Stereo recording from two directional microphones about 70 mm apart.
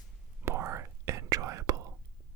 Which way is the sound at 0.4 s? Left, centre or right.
Right.